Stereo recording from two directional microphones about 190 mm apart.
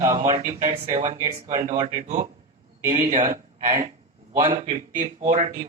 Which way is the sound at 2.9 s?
45° right (ahead or behind).